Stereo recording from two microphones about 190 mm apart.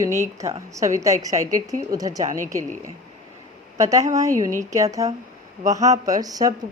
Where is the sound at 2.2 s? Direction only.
40° right (ahead or behind).